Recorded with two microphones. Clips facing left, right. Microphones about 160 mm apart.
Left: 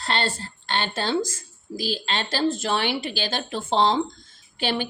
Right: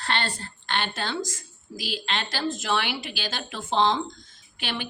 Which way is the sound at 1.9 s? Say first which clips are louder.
Left 3 dB; 30° left (ahead or behind).